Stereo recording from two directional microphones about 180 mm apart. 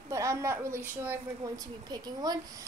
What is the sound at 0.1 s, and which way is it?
A woman's voice, 15° right (ahead or behind).